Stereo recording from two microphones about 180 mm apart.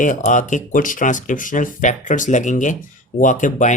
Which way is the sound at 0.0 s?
45° left (ahead or behind).